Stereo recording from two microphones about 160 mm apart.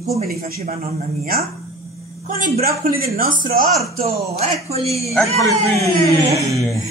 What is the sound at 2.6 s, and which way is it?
Speech, 70° right (ahead or behind).